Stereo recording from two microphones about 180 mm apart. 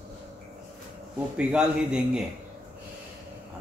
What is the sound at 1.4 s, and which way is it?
Speech, 5° right (ahead or behind).